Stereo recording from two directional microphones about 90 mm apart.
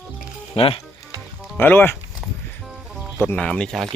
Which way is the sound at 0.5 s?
90° left.